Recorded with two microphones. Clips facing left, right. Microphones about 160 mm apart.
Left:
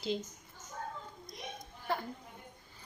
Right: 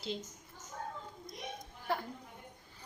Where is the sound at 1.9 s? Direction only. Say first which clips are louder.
Even; 10° right (ahead or behind).